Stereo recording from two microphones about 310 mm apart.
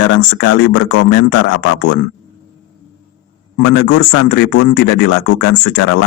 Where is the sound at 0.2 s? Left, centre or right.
Left.